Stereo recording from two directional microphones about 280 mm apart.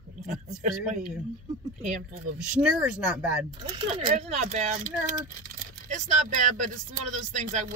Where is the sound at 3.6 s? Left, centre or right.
Centre.